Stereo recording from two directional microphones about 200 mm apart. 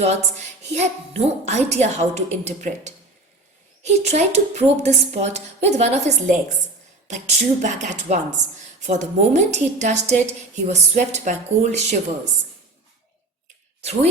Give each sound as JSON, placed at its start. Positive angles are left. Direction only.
{"t": 0.0, "sound": "a woman's voice", "side_deg": -35}
{"t": 4.0, "sound": "a woman's voice", "side_deg": -35}